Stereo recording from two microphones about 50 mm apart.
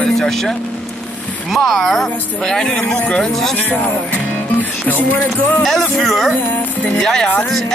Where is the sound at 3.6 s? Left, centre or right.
Left.